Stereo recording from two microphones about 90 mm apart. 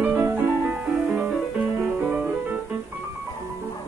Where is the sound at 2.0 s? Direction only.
20° right (ahead or behind).